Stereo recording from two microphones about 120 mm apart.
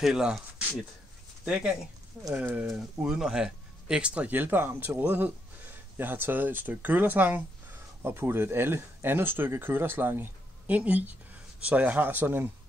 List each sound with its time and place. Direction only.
0.0 s speech: 5° right (ahead or behind)